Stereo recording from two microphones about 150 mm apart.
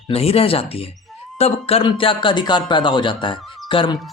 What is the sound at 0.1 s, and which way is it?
Speech, 40° left (ahead or behind).